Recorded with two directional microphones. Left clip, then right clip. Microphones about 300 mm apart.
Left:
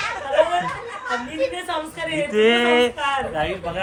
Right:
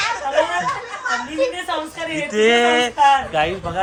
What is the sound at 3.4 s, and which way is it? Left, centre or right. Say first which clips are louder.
Speech: right 5 dB; right.